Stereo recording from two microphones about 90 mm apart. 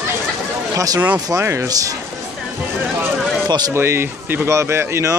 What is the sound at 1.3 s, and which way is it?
Speech, 30° right (ahead or behind).